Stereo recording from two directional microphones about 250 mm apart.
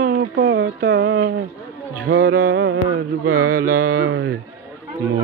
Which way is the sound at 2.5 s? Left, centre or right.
Right.